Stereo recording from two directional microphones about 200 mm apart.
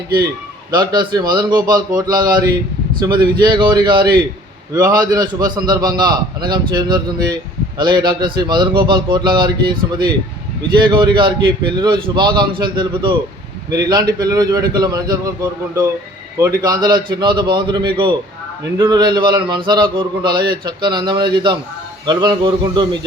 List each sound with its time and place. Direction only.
0.7 s a man's voice: 20° right (ahead or behind)
16.4 s a man's voice: 20° right (ahead or behind)